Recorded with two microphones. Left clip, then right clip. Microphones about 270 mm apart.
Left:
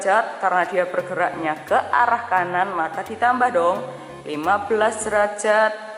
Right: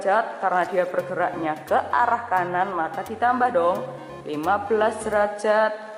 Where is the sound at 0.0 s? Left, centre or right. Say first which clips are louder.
Left 3 dB; centre.